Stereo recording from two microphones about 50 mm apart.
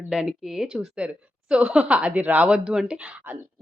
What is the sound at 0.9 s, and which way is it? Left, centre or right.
A woman's voice, right.